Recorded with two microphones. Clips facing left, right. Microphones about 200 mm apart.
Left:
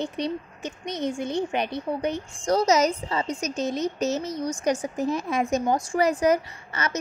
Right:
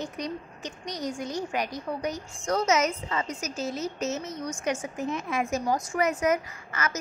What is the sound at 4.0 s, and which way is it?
A woman's voice, 35° left (ahead or behind).